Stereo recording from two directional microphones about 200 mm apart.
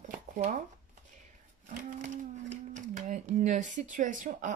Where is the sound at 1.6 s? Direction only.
40° right (ahead or behind).